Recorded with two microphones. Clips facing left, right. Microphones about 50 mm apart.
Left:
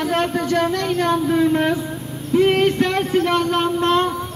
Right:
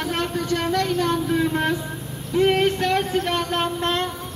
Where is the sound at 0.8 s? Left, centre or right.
Left.